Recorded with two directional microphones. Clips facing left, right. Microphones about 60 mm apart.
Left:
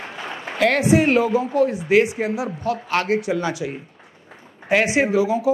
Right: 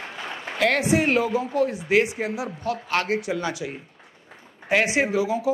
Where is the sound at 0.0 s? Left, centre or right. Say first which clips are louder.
Left 2 dB; left.